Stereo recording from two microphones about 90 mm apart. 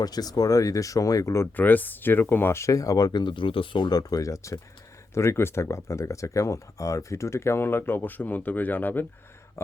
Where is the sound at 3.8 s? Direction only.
45° left (ahead or behind).